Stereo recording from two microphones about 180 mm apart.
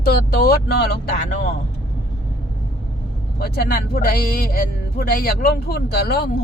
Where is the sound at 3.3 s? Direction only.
60° left (ahead or behind).